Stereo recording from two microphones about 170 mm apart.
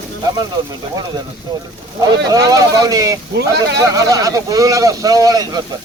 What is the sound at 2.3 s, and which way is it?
Speech, 20° right (ahead or behind).